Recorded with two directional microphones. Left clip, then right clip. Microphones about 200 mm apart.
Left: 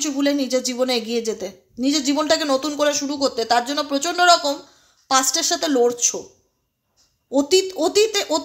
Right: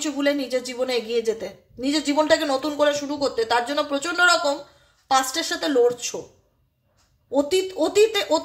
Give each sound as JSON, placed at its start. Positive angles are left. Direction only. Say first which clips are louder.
{"t": 0.0, "sound": "a woman's voice", "louder": "left 2 dB", "side_deg": 40}
{"t": 7.2, "sound": "a woman's voice", "louder": "left 3 dB", "side_deg": 40}